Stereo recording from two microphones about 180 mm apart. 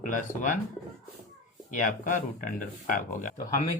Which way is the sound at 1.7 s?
45° left (ahead or behind).